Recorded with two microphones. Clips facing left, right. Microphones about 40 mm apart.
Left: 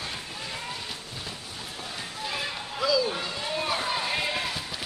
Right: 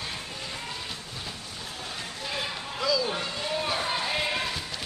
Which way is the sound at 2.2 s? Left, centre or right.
Centre.